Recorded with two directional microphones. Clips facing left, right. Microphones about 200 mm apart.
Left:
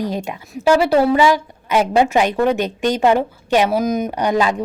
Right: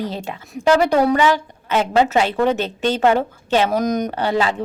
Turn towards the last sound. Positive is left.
turn(degrees=15)  # may be behind; listen again after turning